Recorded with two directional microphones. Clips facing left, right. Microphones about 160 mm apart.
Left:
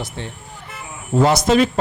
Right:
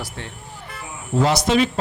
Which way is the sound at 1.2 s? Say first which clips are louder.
Left 3 dB; 45° left (ahead or behind).